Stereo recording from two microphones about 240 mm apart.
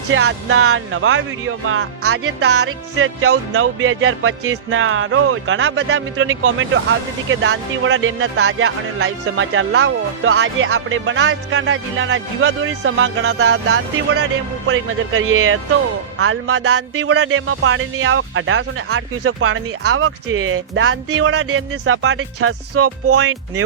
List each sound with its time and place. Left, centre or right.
0.1 s speech: right